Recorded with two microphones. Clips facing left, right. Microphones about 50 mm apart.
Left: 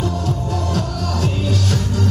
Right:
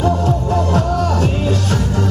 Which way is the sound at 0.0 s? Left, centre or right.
Right.